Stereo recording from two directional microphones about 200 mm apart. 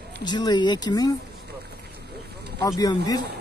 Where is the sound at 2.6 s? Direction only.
20° left (ahead or behind).